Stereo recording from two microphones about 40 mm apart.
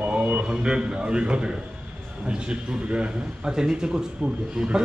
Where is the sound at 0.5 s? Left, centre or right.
Right.